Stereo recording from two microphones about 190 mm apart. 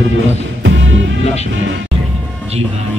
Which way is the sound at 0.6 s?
75° right (ahead or behind).